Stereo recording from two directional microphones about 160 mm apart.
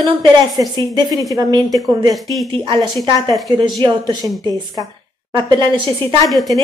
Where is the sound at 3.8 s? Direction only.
25° right (ahead or behind).